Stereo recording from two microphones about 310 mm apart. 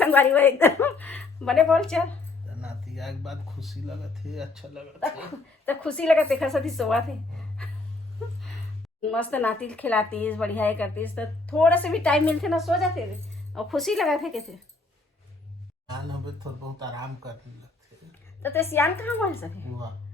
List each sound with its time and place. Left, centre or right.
0.0 s a woman's voice: centre
9.0 s speech: centre
15.9 s speech: centre
18.7 s speech: centre